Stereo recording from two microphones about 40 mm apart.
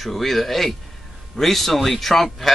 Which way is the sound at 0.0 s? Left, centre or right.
Centre.